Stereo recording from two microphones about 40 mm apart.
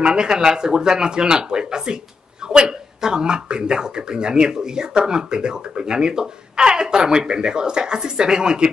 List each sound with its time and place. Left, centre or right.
0.0 s speech: right